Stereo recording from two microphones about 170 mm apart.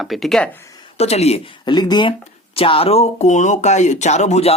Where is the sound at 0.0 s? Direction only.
Centre (ahead or behind).